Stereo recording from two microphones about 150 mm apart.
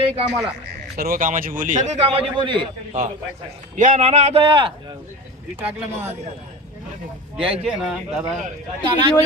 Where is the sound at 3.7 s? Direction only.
60° right (ahead or behind); by 4.7 s 35° right (ahead or behind).